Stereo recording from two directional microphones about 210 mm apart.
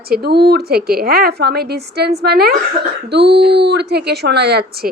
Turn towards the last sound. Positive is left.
turn(degrees=-50)  # may be behind; listen again after turning